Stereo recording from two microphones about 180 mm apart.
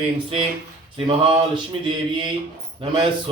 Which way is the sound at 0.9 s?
30° right (ahead or behind).